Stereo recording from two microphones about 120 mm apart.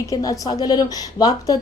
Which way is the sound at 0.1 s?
30° left (ahead or behind).